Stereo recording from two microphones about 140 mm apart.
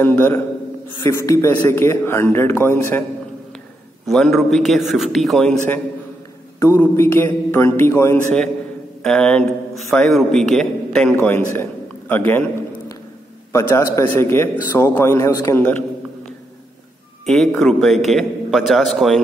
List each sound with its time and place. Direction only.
0.0 s a man's voice: 15° left (ahead or behind)
4.0 s a man's voice: centre (ahead or behind)
6.6 s a man's voice: 20° left (ahead or behind)
9.0 s a man's voice: 5° left (ahead or behind); by 15.6 s 25° left (ahead or behind)
17.3 s a man's voice: 5° left (ahead or behind)